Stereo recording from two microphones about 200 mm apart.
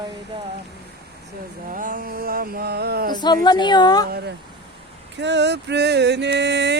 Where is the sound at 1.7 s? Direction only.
40° right (ahead or behind).